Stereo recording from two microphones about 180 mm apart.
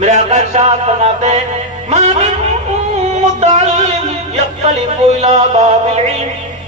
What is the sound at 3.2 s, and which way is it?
Music, 35° right (ahead or behind).